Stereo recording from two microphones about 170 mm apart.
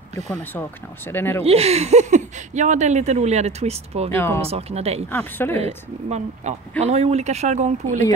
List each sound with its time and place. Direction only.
0.3 s speech: 10° left (ahead or behind)
1.4 s speech: 35° right (ahead or behind)
4.1 s speech: 15° left (ahead or behind)
4.4 s speech: 35° right (ahead or behind)
5.1 s speech: 15° left (ahead or behind)
6.0 s speech: 40° right (ahead or behind)